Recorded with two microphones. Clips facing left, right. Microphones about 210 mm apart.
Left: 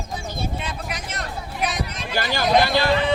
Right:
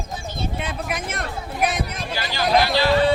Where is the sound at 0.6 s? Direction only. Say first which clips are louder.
Right 4 dB; 55° right (ahead or behind).